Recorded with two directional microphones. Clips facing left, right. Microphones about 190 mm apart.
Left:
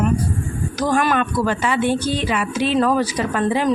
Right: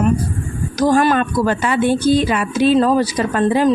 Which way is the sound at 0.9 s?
35° right (ahead or behind).